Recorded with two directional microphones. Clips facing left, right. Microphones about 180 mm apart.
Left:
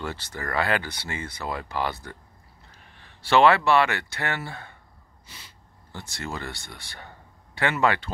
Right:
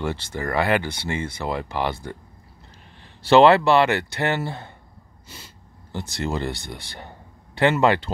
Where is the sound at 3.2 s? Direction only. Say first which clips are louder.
Right 5 dB; 35° right (ahead or behind).